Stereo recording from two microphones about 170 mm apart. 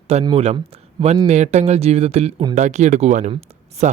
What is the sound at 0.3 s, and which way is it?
Speech, 30° right (ahead or behind).